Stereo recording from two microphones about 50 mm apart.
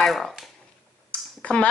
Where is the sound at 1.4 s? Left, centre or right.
Left.